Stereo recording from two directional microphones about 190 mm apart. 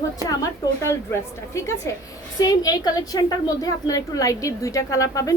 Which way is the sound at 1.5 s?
15° left (ahead or behind).